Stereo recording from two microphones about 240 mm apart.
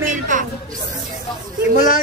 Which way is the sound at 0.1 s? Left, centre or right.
Right.